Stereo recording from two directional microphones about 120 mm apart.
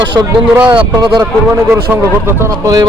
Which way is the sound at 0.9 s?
40° right (ahead or behind).